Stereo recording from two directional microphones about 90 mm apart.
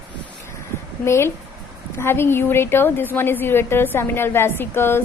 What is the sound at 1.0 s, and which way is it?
A woman's voice, 30° left (ahead or behind).